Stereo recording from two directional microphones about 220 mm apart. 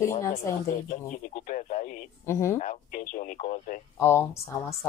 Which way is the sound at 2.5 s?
35° left (ahead or behind).